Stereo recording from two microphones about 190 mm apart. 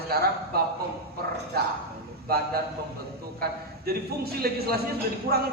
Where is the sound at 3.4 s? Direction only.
55° right (ahead or behind).